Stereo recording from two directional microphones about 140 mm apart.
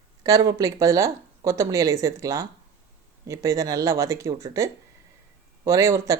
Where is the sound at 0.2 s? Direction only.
25° right (ahead or behind).